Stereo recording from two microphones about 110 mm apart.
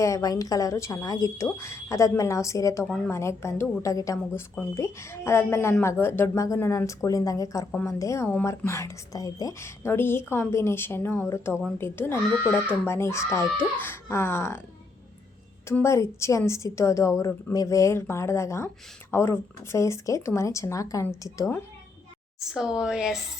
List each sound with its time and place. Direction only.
0.0 s speech: 30° left (ahead or behind)
15.8 s speech: 25° left (ahead or behind)
22.4 s speech: 5° right (ahead or behind)